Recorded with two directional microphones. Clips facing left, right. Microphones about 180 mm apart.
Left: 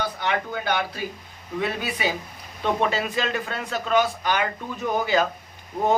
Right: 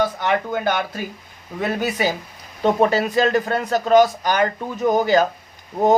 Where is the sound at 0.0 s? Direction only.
45° right (ahead or behind).